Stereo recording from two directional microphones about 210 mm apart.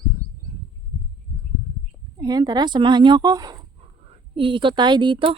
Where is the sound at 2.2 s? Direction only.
20° right (ahead or behind).